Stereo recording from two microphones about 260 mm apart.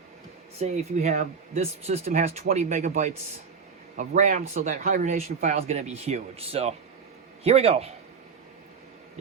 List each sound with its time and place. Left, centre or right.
0.6 s speech: right